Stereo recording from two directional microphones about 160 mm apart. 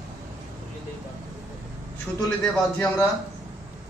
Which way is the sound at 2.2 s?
Centre (ahead or behind).